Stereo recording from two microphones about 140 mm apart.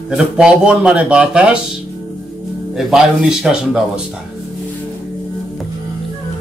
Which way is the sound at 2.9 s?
5° right (ahead or behind).